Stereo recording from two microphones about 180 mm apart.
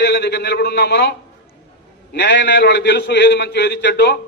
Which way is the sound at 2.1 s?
75° left (ahead or behind).